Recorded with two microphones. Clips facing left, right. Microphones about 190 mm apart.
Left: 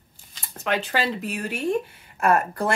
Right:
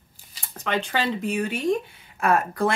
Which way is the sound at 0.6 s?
5° left (ahead or behind).